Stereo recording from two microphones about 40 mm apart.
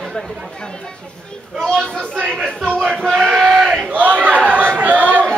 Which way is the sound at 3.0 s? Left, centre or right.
Centre.